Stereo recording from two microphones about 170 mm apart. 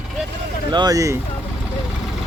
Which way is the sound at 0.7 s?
25° right (ahead or behind).